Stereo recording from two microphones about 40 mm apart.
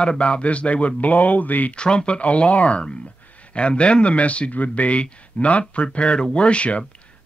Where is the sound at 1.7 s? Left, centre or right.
Left.